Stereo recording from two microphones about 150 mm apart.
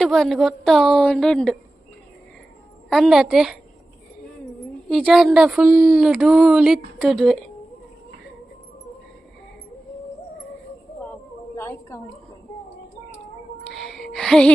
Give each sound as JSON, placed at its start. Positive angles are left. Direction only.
{"t": 0.0, "sound": "a woman's voice", "side_deg": 0}
{"t": 2.9, "sound": "a woman's voice", "side_deg": 0}
{"t": 4.9, "sound": "a woman's voice", "side_deg": 0}
{"t": 11.5, "sound": "a sound", "side_deg": 15}
{"t": 13.7, "sound": "music", "side_deg": 5}